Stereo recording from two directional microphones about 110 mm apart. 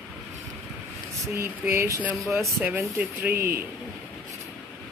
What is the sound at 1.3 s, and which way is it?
Speech, 25° right (ahead or behind).